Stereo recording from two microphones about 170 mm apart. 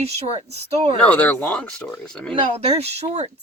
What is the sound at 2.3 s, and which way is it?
Speech, 40° right (ahead or behind).